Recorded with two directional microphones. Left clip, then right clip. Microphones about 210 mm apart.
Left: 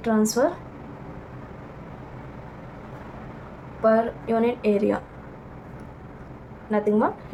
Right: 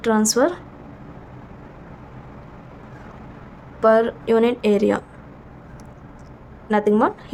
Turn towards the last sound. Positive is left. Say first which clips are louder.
# right 4 dB
turn(degrees=-45)  # may be behind; listen again after turning